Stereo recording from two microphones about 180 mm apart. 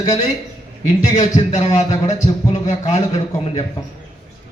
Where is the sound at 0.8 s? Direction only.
40° left (ahead or behind).